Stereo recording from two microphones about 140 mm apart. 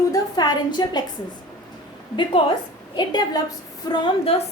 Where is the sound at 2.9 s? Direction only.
30° left (ahead or behind).